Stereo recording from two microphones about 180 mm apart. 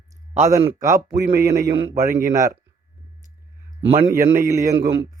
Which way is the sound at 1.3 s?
45° right (ahead or behind).